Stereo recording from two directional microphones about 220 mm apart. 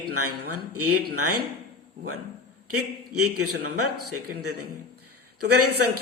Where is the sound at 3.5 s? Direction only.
90° right.